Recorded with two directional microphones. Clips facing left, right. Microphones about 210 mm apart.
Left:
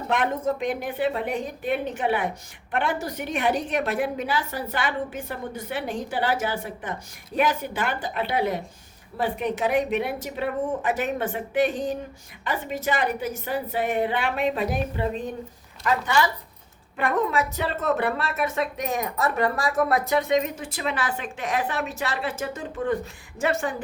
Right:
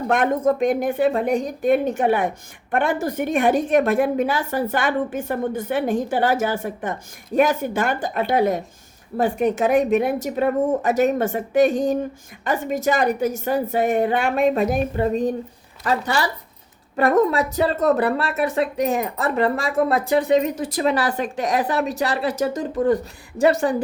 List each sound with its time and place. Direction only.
0.1 s a woman's voice: 50° right (ahead or behind)